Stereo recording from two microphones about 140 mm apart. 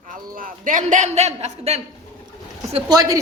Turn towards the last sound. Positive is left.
turn(degrees=-30)  # may be behind; listen again after turning